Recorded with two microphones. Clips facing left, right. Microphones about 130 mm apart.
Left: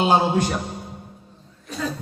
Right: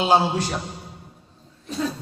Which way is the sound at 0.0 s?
50° left (ahead or behind).